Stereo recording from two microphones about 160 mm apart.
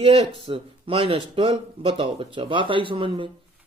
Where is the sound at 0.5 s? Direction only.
35° right (ahead or behind).